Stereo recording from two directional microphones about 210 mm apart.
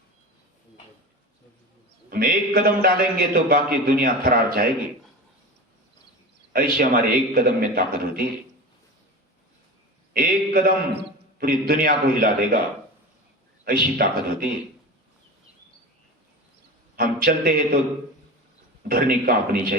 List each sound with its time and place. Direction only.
2.0 s a man's voice: 45° right (ahead or behind)
6.5 s a man's voice: 45° right (ahead or behind)
10.1 s a man's voice: 45° right (ahead or behind)
14.0 s a man's voice: 45° right (ahead or behind)
17.0 s a man's voice: 45° right (ahead or behind)
18.9 s a man's voice: 45° right (ahead or behind)